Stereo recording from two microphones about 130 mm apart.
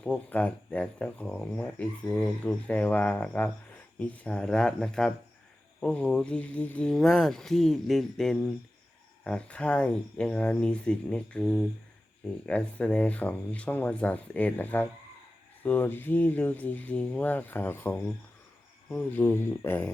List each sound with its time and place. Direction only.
0.0 s speech: 10° left (ahead or behind)